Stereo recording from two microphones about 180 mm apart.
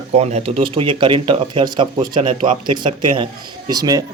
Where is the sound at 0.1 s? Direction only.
35° right (ahead or behind).